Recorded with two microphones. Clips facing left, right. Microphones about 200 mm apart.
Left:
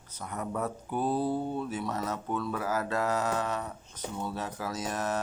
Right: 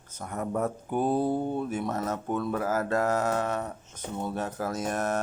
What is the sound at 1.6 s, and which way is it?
Speech, 50° right (ahead or behind).